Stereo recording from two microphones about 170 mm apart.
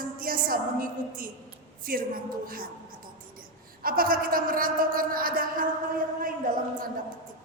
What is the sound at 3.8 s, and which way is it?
A man's voice, 60° right (ahead or behind).